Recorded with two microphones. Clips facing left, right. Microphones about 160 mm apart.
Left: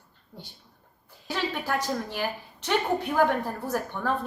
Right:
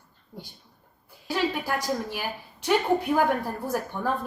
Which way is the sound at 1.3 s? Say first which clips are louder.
Right 2 dB; 10° right (ahead or behind).